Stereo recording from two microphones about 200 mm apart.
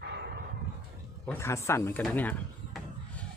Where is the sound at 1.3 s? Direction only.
15° left (ahead or behind).